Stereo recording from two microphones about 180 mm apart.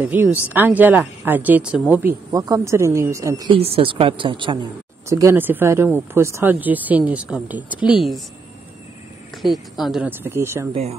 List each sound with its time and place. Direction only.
0.0 s speech: 10° right (ahead or behind)
3.5 s a woman's voice: 30° right (ahead or behind)
5.1 s speech: 15° right (ahead or behind)
9.4 s speech: centre (ahead or behind)
10.7 s speech: 35° right (ahead or behind)